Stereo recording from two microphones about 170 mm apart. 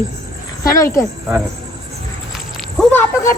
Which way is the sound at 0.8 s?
20° left (ahead or behind).